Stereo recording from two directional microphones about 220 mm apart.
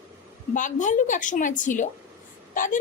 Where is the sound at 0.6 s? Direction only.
35° left (ahead or behind).